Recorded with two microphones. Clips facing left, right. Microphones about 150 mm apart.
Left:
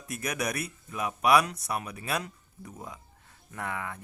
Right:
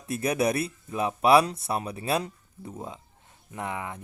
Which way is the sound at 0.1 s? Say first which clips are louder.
Right 7 dB; 30° right (ahead or behind).